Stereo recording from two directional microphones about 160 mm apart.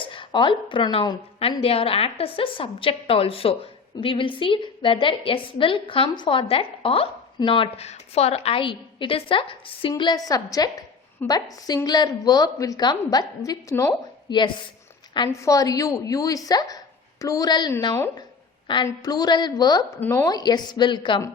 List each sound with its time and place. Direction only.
0.0 s a woman's voice: 30° left (ahead or behind)
20.0 s a woman's voice: 10° left (ahead or behind)
20.2 s a woman's voice: 25° left (ahead or behind)